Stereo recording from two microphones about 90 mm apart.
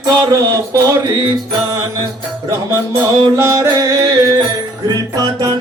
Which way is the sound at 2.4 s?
35° right (ahead or behind).